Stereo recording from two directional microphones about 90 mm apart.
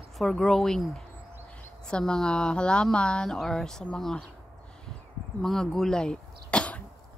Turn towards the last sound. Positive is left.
turn(degrees=15)  # may be behind; listen again after turning